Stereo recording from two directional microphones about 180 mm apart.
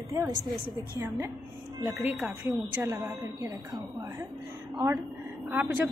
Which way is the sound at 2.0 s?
10° right (ahead or behind).